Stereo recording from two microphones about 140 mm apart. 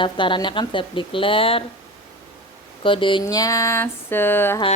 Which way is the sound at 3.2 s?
25° left (ahead or behind).